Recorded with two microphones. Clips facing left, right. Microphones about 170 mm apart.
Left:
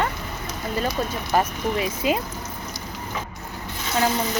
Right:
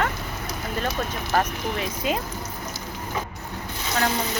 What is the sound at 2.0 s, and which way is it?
Speech, 5° left (ahead or behind).